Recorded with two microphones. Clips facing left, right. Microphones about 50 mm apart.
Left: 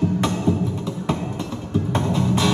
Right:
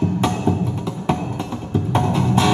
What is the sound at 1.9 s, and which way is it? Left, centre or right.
Music, right.